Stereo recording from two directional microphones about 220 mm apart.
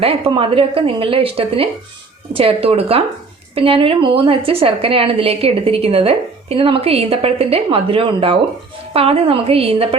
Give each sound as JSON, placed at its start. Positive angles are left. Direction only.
{"t": 0.0, "sound": "a woman's voice", "side_deg": -25}